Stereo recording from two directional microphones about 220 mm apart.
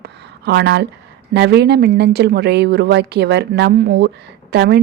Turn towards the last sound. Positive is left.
turn(degrees=-50)  # may be behind; listen again after turning